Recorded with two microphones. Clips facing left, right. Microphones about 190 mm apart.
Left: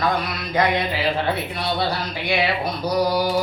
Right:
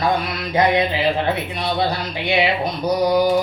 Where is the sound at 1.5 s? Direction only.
20° right (ahead or behind).